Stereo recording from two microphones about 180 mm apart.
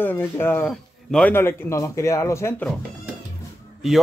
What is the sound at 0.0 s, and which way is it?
A man's voice, 10° left (ahead or behind).